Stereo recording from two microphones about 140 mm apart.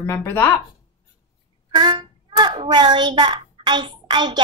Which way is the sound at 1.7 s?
30° right (ahead or behind).